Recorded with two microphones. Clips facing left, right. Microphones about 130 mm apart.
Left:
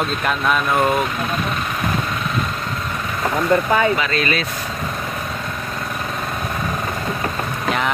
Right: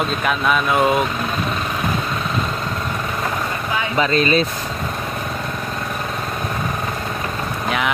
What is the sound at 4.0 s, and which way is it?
Speech, 30° right (ahead or behind).